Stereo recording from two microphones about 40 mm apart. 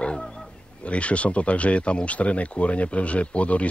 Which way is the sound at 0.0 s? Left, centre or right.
Left.